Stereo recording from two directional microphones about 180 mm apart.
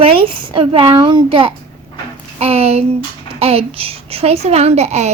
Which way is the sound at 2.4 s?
35° right (ahead or behind).